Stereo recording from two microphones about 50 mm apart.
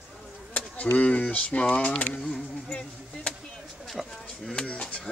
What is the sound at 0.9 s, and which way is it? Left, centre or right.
Speech, left.